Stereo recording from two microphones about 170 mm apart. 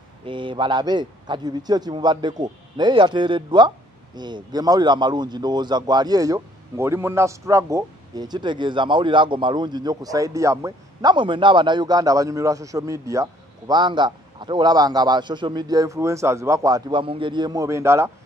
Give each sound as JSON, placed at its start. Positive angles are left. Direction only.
{"t": 0.2, "sound": "a man's voice", "side_deg": -30}